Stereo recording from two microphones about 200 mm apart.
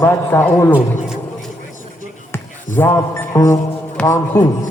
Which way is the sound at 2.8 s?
15° left (ahead or behind).